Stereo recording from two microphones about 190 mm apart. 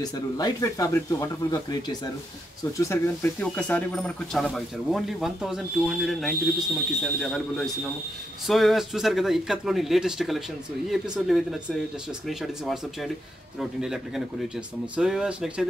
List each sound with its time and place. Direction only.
0.0 s speech: 20° left (ahead or behind); by 15.6 s 5° right (ahead or behind)